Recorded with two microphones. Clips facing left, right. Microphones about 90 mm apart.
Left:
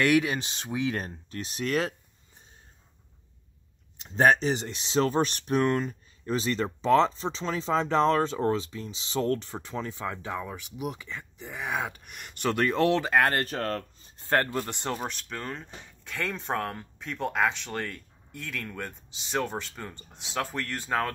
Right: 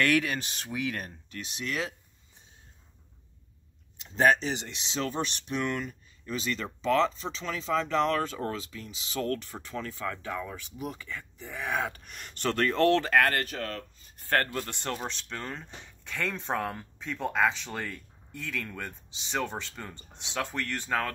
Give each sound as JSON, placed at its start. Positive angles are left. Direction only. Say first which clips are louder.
{"t": 0.0, "sound": "speech", "louder": "left 3 dB", "side_deg": 20}
{"t": 4.0, "sound": "speech", "louder": "left 2 dB", "side_deg": 40}
{"t": 13.2, "sound": "speech", "louder": "left 2 dB", "side_deg": 30}
{"t": 14.1, "sound": "speech", "louder": "left 2 dB", "side_deg": 20}